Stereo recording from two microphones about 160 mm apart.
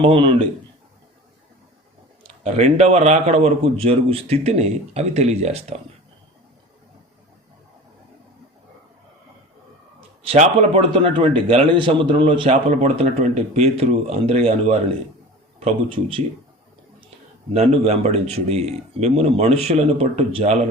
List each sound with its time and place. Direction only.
0.0 s a man's voice: 30° right (ahead or behind)
2.2 s a man's voice: 45° right (ahead or behind)
10.2 s a man's voice: 45° right (ahead or behind)
17.5 s a man's voice: 40° right (ahead or behind)